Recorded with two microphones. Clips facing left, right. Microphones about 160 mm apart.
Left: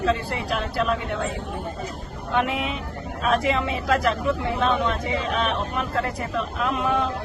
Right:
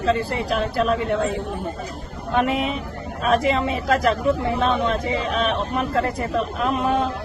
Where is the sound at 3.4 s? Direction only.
40° right (ahead or behind).